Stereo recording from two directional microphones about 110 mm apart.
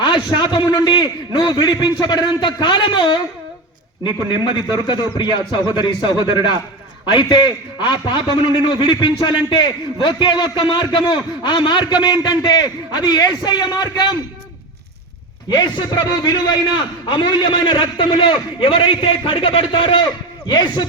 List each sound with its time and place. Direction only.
0.0 s a man's voice: 45° left (ahead or behind)
4.7 s a man's voice: 45° left (ahead or behind)
15.4 s a man's voice: 45° left (ahead or behind)